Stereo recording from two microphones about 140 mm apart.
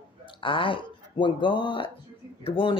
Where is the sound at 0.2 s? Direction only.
40° left (ahead or behind).